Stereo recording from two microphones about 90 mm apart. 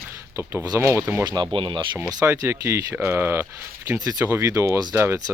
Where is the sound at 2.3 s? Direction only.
30° right (ahead or behind).